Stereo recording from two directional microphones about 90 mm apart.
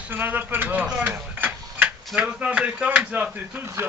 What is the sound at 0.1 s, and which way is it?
Speech, 20° right (ahead or behind).